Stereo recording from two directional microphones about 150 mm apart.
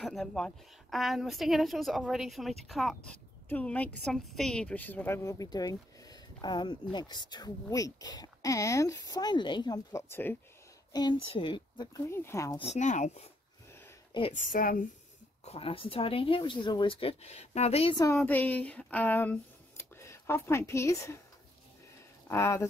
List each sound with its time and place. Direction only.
0.0 s a woman's voice: centre (ahead or behind); by 9.8 s 30° left (ahead or behind)
9.9 s speech: 15° left (ahead or behind)
10.9 s a woman's voice: 30° left (ahead or behind)
12.0 s speech: 15° left (ahead or behind)
12.5 s speech: 45° left (ahead or behind)
14.3 s a woman's voice: 60° left (ahead or behind)
15.4 s speech: 40° left (ahead or behind)
17.9 s a woman's voice: 25° left (ahead or behind)
18.2 s speech: 10° left (ahead or behind)
22.3 s speech: 20° left (ahead or behind)